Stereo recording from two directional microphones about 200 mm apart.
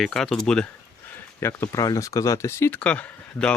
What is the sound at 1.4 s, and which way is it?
Speech, 15° left (ahead or behind).